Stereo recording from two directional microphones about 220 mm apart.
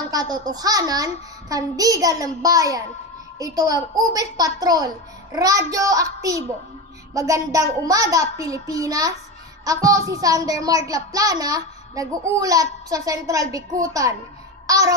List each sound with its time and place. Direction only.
0.1 s a child's voice: 15° right (ahead or behind)
7.2 s a child's voice: 15° right (ahead or behind)